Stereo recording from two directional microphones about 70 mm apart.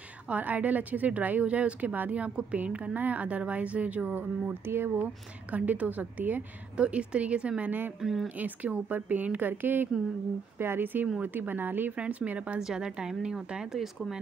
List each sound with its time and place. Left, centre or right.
0.3 s a woman's voice: right
8.0 s speech: centre
8.4 s a woman's voice: right; by 14.2 s centre